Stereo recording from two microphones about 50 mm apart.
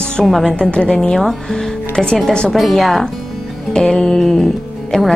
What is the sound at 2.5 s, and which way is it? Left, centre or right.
Speech, centre.